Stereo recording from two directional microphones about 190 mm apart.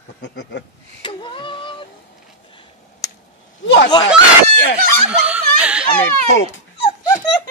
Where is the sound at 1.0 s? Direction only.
25° left (ahead or behind).